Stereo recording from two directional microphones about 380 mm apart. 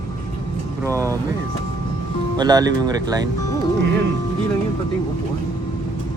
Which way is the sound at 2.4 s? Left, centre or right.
Centre.